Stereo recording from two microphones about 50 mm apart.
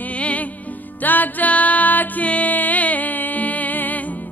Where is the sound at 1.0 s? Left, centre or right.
Left.